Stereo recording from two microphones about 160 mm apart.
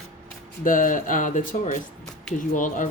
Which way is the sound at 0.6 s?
55° left (ahead or behind).